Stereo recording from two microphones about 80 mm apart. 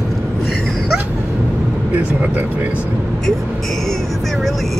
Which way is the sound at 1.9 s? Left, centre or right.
Centre.